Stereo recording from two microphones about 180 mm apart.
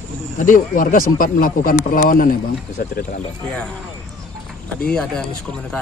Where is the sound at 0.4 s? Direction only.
50° left (ahead or behind).